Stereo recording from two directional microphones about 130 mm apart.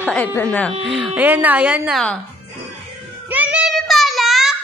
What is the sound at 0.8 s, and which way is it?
Speech, 5° right (ahead or behind).